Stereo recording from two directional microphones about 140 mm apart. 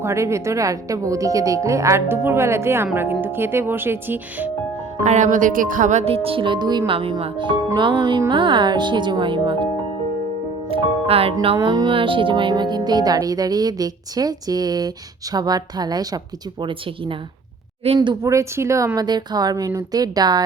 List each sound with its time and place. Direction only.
0.0 s speech: 20° right (ahead or behind)
5.0 s speech: 60° right (ahead or behind); by 9.6 s 35° right (ahead or behind)
10.7 s speech: 45° right (ahead or behind)
11.4 s speech: 35° right (ahead or behind)
18.3 s speech: 20° right (ahead or behind)